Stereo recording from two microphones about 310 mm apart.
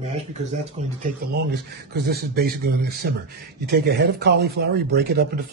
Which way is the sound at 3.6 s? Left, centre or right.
Right.